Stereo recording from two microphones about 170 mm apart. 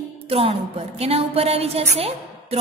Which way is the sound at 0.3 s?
35° right (ahead or behind).